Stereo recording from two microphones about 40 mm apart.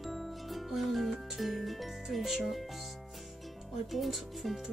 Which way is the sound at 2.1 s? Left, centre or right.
Centre.